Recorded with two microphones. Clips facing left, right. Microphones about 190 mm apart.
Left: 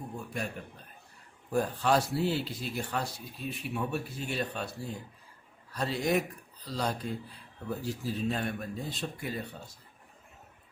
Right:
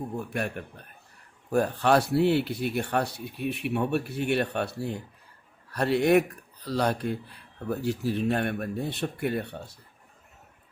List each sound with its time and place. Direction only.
0.3 s speech: 65° right (ahead or behind)